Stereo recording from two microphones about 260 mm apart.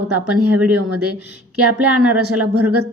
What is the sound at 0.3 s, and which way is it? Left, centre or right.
A woman's voice, right.